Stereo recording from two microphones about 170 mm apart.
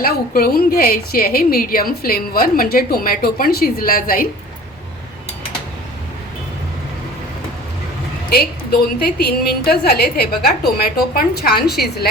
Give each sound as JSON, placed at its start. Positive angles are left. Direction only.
{"t": 0.0, "sound": "a woman's voice", "side_deg": 60}
{"t": 8.3, "sound": "a woman's voice", "side_deg": 65}